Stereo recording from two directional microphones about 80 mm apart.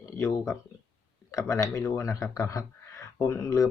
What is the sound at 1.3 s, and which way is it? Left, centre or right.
Speech, left.